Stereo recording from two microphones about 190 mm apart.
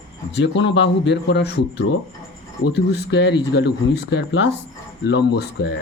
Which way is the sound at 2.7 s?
65° left (ahead or behind).